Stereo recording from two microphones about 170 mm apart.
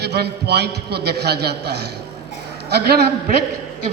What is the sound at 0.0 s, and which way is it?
A man's voice, 75° right (ahead or behind).